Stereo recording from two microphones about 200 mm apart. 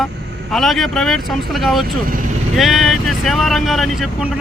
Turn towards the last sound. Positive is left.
turn(degrees=0)  # may be behind; listen again after turning